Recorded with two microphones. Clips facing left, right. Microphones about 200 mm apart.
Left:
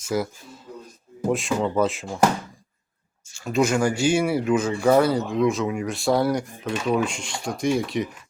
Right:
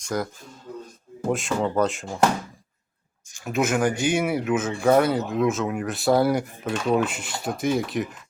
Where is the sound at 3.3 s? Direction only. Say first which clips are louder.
Left 2 dB; 15° right (ahead or behind).